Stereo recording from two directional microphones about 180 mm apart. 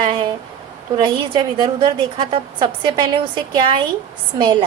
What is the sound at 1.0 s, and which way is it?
A woman's voice, 25° right (ahead or behind).